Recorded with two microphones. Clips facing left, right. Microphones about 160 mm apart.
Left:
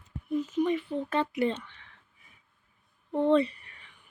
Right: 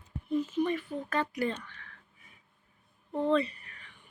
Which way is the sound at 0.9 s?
25° left (ahead or behind).